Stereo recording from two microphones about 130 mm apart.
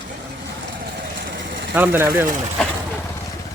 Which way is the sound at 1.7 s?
15° right (ahead or behind).